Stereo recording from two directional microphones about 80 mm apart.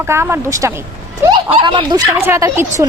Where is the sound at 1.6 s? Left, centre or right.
Right.